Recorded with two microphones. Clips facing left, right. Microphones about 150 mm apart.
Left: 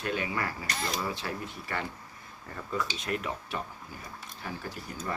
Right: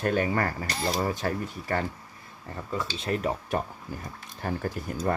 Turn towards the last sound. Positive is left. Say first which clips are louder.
# right 8 dB
turn(degrees=-50)  # may be behind; listen again after turning